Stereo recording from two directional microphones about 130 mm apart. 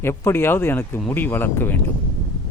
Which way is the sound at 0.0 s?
20° left (ahead or behind).